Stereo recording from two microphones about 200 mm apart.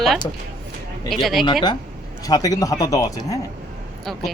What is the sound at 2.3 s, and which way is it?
Speech, 15° left (ahead or behind).